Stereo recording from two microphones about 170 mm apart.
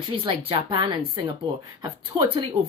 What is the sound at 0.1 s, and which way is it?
Speech, 30° right (ahead or behind).